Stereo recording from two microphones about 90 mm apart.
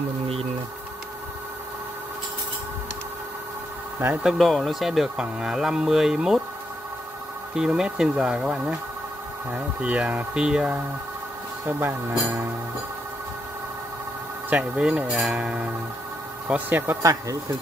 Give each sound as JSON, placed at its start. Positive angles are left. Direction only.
{"t": 4.2, "sound": "speech", "side_deg": -5}
{"t": 7.5, "sound": "speech", "side_deg": -5}
{"t": 11.6, "sound": "speech", "side_deg": -20}
{"t": 14.5, "sound": "speech", "side_deg": -10}
{"t": 17.0, "sound": "speech", "side_deg": -40}